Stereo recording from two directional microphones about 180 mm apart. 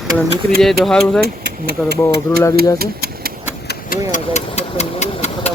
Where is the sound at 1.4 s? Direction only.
65° right (ahead or behind).